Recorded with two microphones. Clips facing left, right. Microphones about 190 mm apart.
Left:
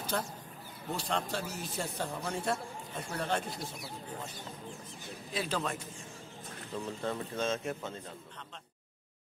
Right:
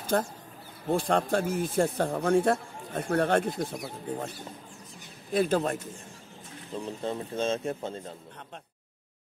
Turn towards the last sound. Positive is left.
turn(degrees=-30)  # may be behind; listen again after turning